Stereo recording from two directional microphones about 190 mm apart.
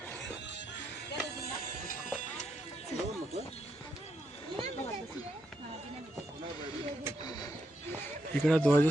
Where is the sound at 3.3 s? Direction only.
35° left (ahead or behind).